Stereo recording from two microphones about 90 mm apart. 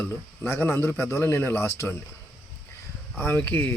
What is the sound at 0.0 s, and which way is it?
Speech, 25° left (ahead or behind).